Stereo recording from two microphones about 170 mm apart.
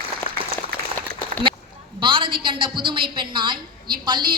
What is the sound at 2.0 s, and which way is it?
A woman's voice, 30° right (ahead or behind).